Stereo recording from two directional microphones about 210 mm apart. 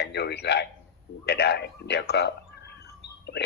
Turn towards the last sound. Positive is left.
turn(degrees=50)  # may be behind; listen again after turning